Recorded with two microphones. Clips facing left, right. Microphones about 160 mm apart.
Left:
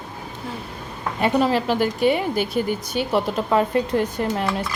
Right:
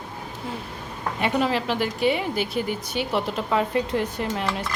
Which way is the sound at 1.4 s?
40° left (ahead or behind).